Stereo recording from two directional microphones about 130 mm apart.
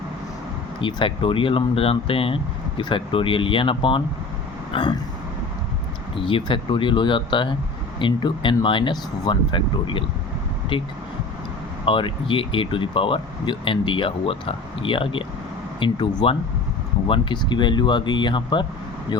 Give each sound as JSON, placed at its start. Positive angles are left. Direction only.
{"t": 0.8, "sound": "speech", "side_deg": 40}
{"t": 4.7, "sound": "a sound", "side_deg": 40}
{"t": 6.1, "sound": "speech", "side_deg": 40}
{"t": 11.9, "sound": "speech", "side_deg": 40}